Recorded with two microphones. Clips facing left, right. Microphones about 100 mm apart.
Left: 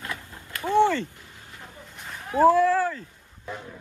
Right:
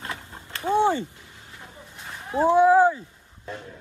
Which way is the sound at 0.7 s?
70° left (ahead or behind).